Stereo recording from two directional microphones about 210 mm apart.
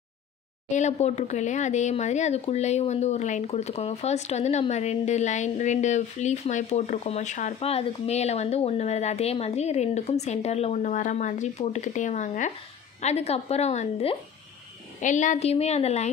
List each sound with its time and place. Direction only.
0.7 s speech: 35° left (ahead or behind)